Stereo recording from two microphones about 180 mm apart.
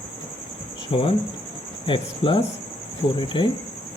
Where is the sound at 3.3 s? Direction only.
30° left (ahead or behind).